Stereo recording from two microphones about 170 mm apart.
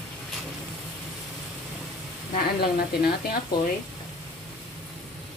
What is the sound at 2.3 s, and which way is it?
A woman's voice, 65° left (ahead or behind).